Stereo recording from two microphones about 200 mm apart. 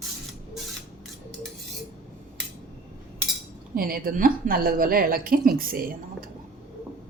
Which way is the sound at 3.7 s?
45° right (ahead or behind).